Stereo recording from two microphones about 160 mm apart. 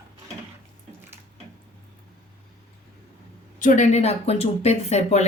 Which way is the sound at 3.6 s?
50° left (ahead or behind).